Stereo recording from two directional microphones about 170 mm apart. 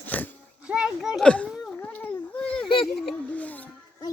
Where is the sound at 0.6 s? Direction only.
5° right (ahead or behind).